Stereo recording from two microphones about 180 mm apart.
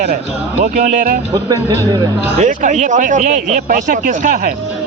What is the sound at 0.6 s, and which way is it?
Speech, 45° right (ahead or behind).